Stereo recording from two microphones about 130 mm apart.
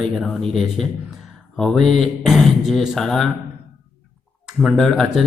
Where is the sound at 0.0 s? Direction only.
5° left (ahead or behind).